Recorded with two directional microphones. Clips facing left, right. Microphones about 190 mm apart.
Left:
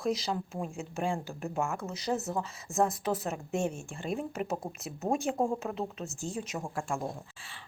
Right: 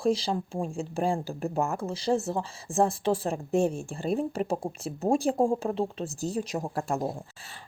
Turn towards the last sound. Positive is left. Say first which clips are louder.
# right 5 dB
turn(degrees=-40)  # may be behind; listen again after turning